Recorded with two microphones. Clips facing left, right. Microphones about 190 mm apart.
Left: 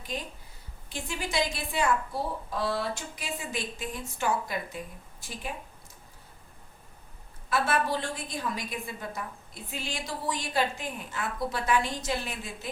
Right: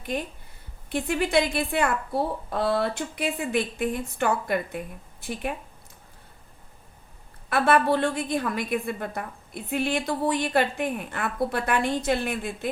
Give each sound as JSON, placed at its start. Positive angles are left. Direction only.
{"t": 0.0, "sound": "a woman's voice", "side_deg": -60}
{"t": 7.5, "sound": "a woman's voice", "side_deg": -60}